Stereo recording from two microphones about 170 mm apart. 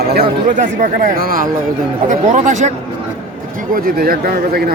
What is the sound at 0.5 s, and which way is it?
Speech, 50° right (ahead or behind).